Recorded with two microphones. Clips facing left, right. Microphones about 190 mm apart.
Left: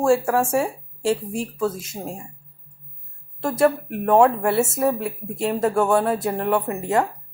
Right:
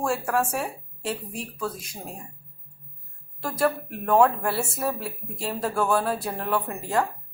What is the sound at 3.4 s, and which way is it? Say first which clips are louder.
Speech: left 6 dB; 25° left (ahead or behind).